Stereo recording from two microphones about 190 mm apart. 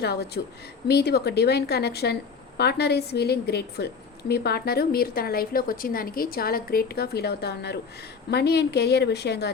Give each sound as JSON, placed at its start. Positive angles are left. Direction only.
{"t": 0.0, "sound": "a woman's voice", "side_deg": 60}